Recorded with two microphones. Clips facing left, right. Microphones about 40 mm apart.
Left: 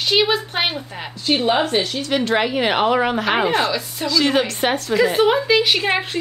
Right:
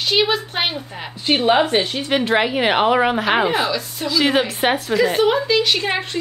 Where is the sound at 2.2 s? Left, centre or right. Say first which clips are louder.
Right 1 dB; centre.